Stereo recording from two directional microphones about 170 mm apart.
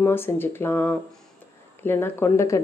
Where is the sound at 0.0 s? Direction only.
15° left (ahead or behind).